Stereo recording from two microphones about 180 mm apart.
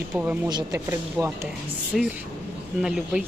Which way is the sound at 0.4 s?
20° right (ahead or behind).